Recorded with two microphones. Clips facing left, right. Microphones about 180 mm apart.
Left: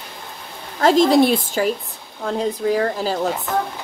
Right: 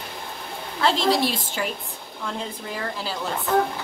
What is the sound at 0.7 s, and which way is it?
Speech, 45° left (ahead or behind).